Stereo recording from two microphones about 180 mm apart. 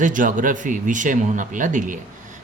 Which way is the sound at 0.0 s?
45° right (ahead or behind).